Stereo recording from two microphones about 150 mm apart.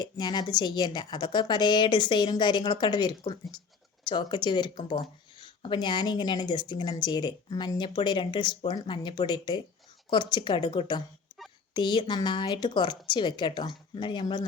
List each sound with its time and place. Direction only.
0.0 s a woman's voice: 30° left (ahead or behind)